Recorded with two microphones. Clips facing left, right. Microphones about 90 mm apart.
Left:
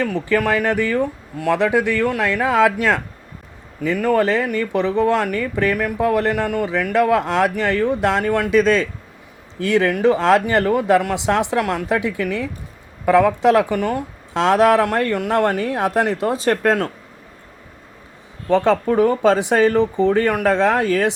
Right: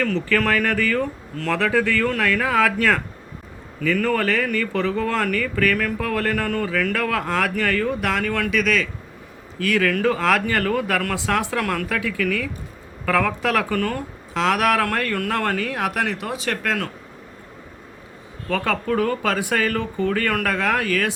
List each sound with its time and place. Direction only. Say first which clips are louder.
0.0 s speech: left 2 dB; 15° left (ahead or behind); by 16.9 s 35° left (ahead or behind)
18.4 s speech: left 7 dB; 25° left (ahead or behind)